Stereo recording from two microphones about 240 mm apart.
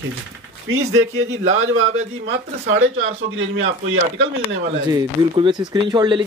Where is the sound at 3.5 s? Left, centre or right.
Right.